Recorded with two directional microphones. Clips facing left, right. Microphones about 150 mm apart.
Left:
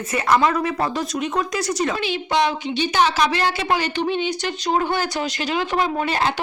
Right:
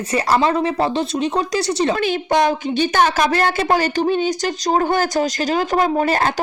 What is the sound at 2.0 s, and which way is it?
A woman's voice, 45° right (ahead or behind).